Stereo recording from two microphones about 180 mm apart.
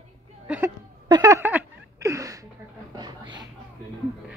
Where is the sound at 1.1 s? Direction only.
20° right (ahead or behind).